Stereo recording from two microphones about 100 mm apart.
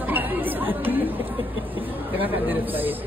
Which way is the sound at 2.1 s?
20° right (ahead or behind).